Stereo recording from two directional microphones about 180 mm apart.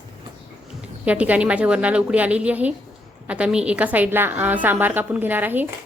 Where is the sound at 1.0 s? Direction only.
5° right (ahead or behind).